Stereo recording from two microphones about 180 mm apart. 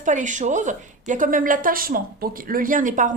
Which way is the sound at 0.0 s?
45° right (ahead or behind).